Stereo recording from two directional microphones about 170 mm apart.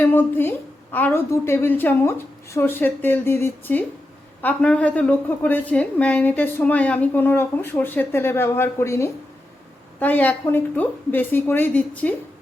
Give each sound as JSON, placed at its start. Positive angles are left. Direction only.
{"t": 0.0, "sound": "a woman's voice", "side_deg": 10}